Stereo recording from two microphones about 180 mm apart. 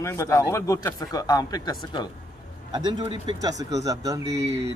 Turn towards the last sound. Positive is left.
turn(degrees=-20)  # may be behind; listen again after turning